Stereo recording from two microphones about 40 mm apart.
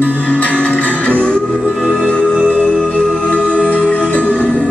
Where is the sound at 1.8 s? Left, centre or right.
Centre.